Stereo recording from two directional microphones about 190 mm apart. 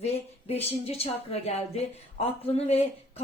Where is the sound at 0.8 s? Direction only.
30° left (ahead or behind).